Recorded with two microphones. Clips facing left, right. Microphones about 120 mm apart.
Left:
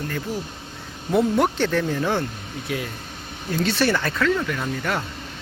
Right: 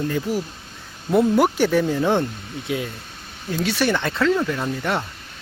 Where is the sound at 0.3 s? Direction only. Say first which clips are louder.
Right 4 dB; 10° right (ahead or behind).